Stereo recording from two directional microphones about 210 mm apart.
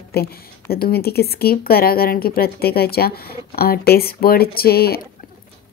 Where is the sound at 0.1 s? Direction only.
45° left (ahead or behind).